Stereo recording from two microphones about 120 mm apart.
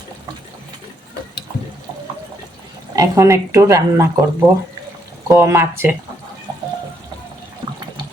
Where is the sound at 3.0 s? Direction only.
25° right (ahead or behind).